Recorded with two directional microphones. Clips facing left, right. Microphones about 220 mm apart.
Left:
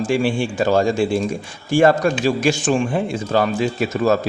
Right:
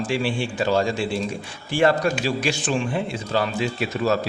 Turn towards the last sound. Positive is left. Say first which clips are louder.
# left 5 dB
turn(degrees=45)  # may be behind; listen again after turning